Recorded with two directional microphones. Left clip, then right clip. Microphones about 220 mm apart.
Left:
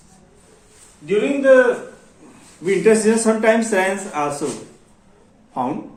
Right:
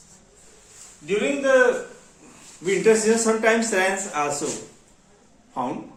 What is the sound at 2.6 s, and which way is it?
Speech, 10° left (ahead or behind).